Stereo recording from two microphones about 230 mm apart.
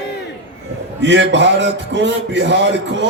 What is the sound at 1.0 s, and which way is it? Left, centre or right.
A man's voice, right.